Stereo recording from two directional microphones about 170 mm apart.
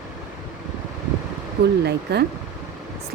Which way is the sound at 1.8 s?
75° right (ahead or behind).